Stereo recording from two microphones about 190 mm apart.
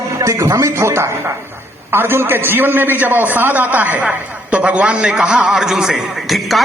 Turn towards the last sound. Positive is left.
turn(degrees=0)  # may be behind; listen again after turning